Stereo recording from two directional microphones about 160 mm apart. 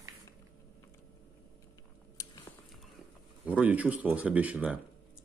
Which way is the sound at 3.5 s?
10° right (ahead or behind).